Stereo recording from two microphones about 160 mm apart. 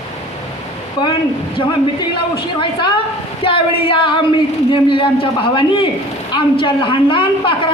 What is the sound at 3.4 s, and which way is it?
A woman's voice, 35° left (ahead or behind).